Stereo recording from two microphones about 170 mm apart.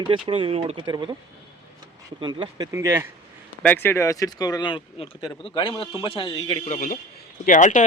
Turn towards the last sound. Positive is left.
turn(degrees=50)  # may be behind; listen again after turning